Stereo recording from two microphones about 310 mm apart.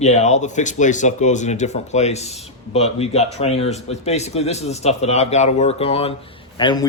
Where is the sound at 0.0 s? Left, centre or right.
Left.